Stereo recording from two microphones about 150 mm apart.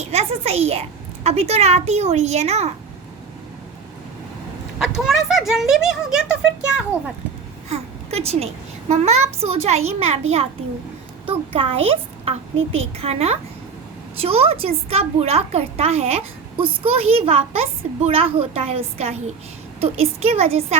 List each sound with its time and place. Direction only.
0.1 s a woman's voice: 45° right (ahead or behind)
4.9 s a child's voice: centre (ahead or behind)
7.7 s a woman's voice: 45° right (ahead or behind)